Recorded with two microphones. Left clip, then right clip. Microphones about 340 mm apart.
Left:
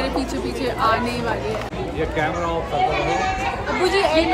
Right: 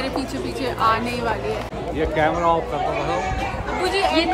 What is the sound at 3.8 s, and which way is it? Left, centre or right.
Speech, centre.